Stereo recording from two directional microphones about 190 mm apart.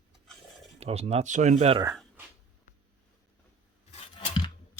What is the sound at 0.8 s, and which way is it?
Speech, 35° right (ahead or behind).